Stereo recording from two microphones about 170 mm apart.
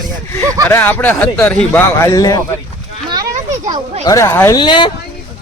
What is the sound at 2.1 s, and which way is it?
Speech, 20° left (ahead or behind).